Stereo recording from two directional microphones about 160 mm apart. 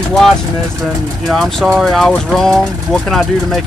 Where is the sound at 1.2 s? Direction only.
Centre (ahead or behind).